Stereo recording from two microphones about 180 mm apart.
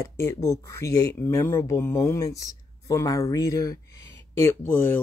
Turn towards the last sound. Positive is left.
turn(degrees=10)  # may be behind; listen again after turning